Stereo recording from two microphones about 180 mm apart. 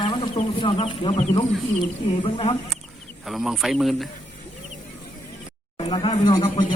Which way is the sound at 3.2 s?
Centre (ahead or behind).